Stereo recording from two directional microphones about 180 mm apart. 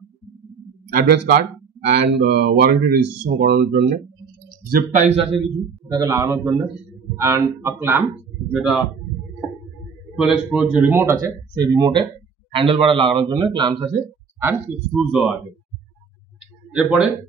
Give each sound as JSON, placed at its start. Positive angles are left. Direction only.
{"t": 1.0, "sound": "speech", "side_deg": -65}
{"t": 4.6, "sound": "speech", "side_deg": -50}
{"t": 5.9, "sound": "speech", "side_deg": -20}
{"t": 10.1, "sound": "a man's voice", "side_deg": -5}
{"t": 14.4, "sound": "speech", "side_deg": -5}
{"t": 16.7, "sound": "speech", "side_deg": -5}